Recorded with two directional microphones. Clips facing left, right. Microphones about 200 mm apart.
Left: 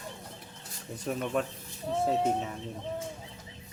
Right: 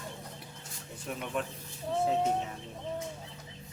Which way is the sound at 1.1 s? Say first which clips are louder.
Left 6 dB; 45° left (ahead or behind).